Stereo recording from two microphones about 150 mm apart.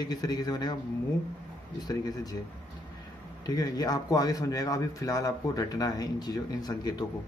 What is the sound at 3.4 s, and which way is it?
A man's voice, 25° left (ahead or behind).